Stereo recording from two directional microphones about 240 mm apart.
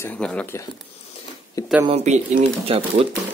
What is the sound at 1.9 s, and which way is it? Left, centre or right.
Speech, right.